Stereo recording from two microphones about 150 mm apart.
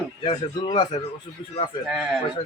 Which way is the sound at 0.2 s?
35° left (ahead or behind).